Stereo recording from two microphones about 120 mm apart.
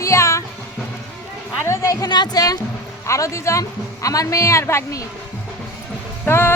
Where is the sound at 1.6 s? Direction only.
25° left (ahead or behind).